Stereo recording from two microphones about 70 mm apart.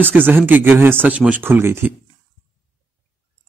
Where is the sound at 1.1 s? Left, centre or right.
Centre.